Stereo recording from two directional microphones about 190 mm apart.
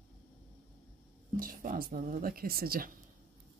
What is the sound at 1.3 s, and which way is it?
Speech, 45° right (ahead or behind).